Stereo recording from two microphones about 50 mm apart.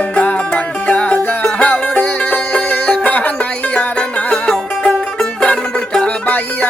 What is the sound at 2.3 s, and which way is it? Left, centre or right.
Music, left.